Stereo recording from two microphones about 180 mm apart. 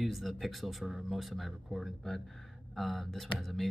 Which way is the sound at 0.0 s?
Centre (ahead or behind).